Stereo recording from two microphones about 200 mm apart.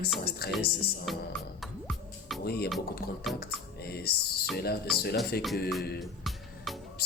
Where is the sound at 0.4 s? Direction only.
50° left (ahead or behind).